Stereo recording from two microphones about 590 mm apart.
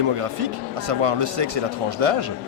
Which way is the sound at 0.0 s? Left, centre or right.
Right.